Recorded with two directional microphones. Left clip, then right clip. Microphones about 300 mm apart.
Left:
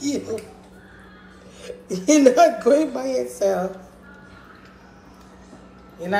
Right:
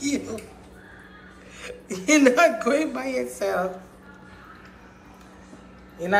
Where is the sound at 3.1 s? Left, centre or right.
Centre.